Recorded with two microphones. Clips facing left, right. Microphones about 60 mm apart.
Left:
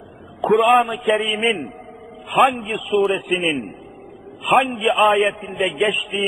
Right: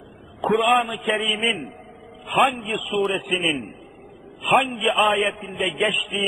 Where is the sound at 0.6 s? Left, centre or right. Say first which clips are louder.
Left 5 dB; centre.